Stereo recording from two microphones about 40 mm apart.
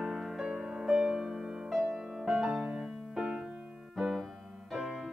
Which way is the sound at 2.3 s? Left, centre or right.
Right.